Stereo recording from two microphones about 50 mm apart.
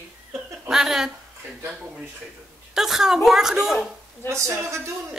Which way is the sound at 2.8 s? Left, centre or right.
Centre.